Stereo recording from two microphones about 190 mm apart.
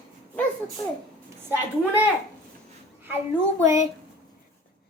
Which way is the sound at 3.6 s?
15° right (ahead or behind).